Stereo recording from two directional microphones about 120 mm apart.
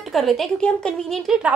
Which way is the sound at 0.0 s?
Centre (ahead or behind).